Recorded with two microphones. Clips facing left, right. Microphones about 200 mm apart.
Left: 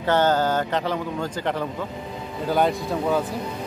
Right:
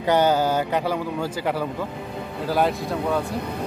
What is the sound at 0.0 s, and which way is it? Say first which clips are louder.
Speech: right 1 dB; 10° right (ahead or behind).